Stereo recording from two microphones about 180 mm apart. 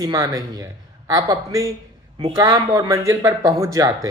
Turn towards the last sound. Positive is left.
turn(degrees=-20)  # may be behind; listen again after turning